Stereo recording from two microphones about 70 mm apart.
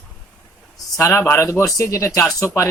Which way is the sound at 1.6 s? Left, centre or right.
Left.